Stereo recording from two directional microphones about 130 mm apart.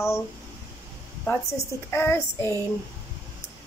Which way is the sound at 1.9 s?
20° left (ahead or behind).